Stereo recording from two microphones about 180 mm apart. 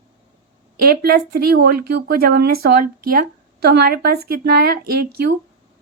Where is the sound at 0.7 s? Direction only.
55° right (ahead or behind).